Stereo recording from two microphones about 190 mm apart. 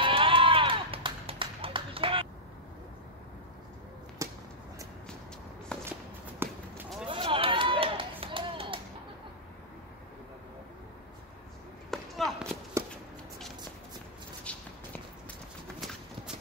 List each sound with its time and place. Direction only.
0.0 s run: 25° right (ahead or behind)
4.2 s a sound: 15° right (ahead or behind)
5.7 s walk: 5° left (ahead or behind)
6.4 s run: 10° right (ahead or behind)
7.1 s run: 30° right (ahead or behind)
11.9 s basketball bounce: centre (ahead or behind)
12.8 s shuffling cards: 15° right (ahead or behind)
14.4 s walk: 5° left (ahead or behind)